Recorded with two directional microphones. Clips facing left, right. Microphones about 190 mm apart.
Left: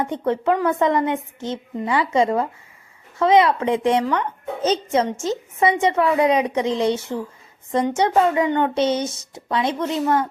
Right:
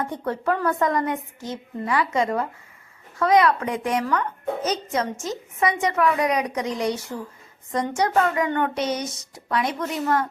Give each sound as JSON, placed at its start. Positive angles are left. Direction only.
{"t": 0.0, "sound": "a woman's voice", "side_deg": 20}